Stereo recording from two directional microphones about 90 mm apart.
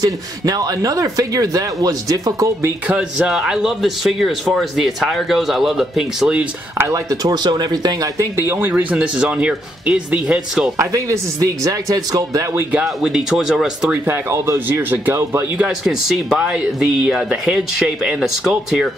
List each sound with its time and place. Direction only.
0.0 s a man's voice: 45° right (ahead or behind)
2.9 s speech: 10° right (ahead or behind)
6.9 s speech: 45° right (ahead or behind)
8.2 s speech: 25° right (ahead or behind)
8.9 s speech: 10° right (ahead or behind)
10.8 s a man's voice: 35° right (ahead or behind)
12.8 s speech: 5° right (ahead or behind)
14.0 s speech: 30° right (ahead or behind)
15.5 s speech: 10° right (ahead or behind)